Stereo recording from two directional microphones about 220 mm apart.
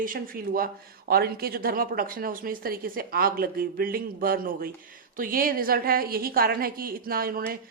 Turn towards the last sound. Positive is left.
turn(degrees=-40)  # may be behind; listen again after turning